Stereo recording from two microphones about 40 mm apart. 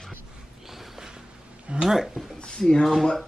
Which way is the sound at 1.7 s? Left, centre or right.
Right.